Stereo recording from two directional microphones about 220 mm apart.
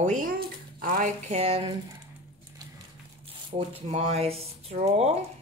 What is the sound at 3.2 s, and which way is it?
Speech, 25° right (ahead or behind).